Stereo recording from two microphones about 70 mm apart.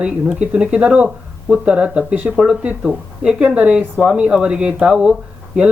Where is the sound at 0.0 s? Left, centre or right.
Centre.